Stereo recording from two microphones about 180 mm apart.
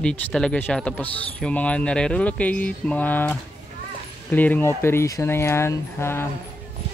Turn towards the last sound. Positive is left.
turn(degrees=15)  # may be behind; listen again after turning